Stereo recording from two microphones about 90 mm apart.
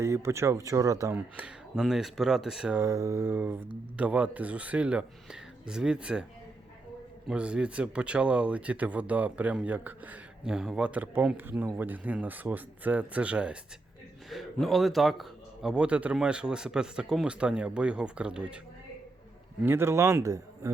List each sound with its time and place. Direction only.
0.0 s speech: 30° right (ahead or behind)
1.1 s speech: 15° right (ahead or behind)
2.7 s mantra: 35° right (ahead or behind)
3.9 s speech: 15° right (ahead or behind)
7.3 s speech: 10° right (ahead or behind)
14.3 s speech: centre (ahead or behind)
19.6 s speech: 25° right (ahead or behind)